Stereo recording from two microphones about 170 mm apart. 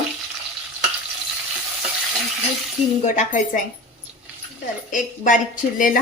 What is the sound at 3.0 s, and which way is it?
Speech, 50° left (ahead or behind).